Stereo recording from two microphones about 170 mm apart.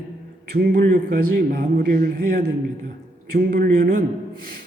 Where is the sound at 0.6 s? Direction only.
60° right (ahead or behind).